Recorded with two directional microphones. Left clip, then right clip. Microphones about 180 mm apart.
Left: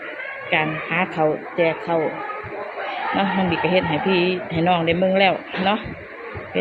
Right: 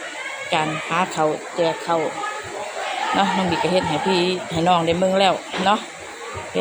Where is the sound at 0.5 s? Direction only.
10° right (ahead or behind).